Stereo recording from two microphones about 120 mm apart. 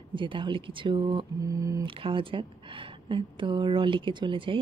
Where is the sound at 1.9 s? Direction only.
45° right (ahead or behind).